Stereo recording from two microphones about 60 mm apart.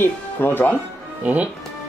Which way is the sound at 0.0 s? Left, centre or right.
Left.